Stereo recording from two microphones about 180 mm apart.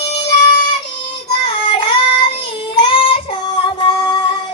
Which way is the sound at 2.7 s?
30° left (ahead or behind).